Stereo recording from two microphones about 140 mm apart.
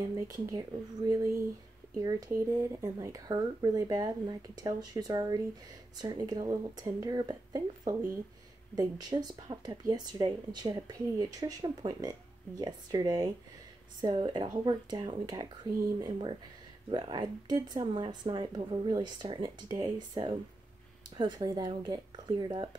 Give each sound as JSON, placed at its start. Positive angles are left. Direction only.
{"t": 0.1, "sound": "speech", "side_deg": -25}